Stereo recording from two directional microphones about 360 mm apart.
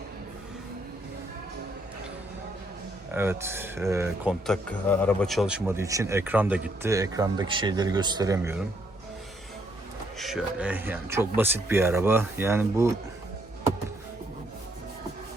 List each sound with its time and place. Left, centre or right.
3.1 s speech: centre
10.2 s speech: centre